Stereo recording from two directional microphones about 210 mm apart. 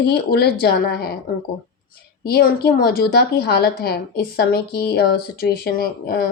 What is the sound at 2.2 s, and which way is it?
A woman's voice, 50° left (ahead or behind).